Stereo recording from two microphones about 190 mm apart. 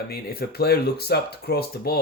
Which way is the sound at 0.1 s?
55° left (ahead or behind).